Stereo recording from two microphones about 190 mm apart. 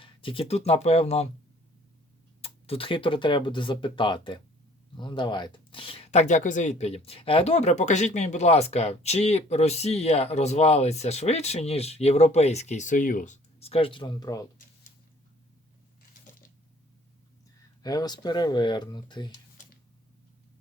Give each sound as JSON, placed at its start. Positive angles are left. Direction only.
{"t": 0.0, "sound": "speech", "side_deg": 30}
{"t": 2.4, "sound": "speech", "side_deg": 30}
{"t": 17.8, "sound": "speech", "side_deg": 20}